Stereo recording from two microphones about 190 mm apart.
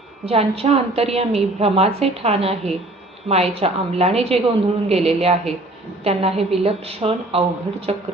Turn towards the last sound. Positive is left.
turn(degrees=-30)  # may be behind; listen again after turning